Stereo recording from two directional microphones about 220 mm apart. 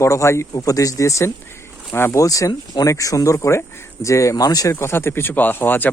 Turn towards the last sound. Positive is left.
turn(degrees=10)  # may be behind; listen again after turning